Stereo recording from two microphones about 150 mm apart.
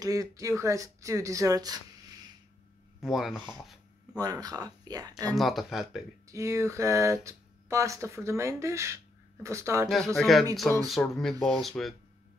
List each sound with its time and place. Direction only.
0.0 s speech: 25° right (ahead or behind)
3.0 s speech: centre (ahead or behind)
4.2 s speech: 25° right (ahead or behind)
5.3 s speech: centre (ahead or behind)
6.2 s speech: 20° right (ahead or behind)
9.8 s speech: centre (ahead or behind)